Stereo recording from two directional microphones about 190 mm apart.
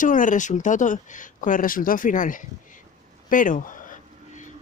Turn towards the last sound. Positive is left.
turn(degrees=40)  # may be behind; listen again after turning